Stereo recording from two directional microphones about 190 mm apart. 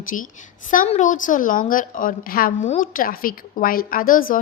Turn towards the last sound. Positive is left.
turn(degrees=45)  # may be behind; listen again after turning